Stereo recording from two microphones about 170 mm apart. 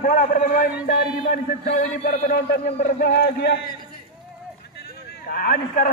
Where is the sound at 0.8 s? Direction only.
65° left (ahead or behind).